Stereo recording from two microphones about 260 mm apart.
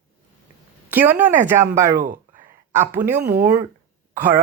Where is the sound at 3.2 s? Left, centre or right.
Right.